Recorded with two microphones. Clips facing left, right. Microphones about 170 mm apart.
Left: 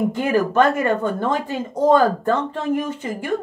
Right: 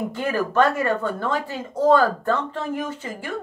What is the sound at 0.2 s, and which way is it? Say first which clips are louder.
A woman's voice: left 2 dB; 15° left (ahead or behind).